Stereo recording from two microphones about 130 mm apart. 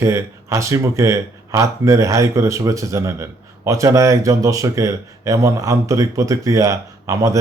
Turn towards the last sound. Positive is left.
turn(degrees=-25)  # may be behind; listen again after turning